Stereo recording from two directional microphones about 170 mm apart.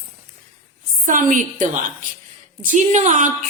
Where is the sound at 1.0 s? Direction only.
50° right (ahead or behind).